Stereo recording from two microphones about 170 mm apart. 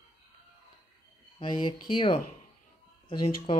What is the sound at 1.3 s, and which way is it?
Speech, 25° left (ahead or behind).